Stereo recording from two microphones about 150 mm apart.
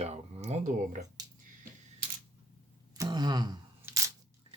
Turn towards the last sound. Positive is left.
turn(degrees=-15)  # may be behind; listen again after turning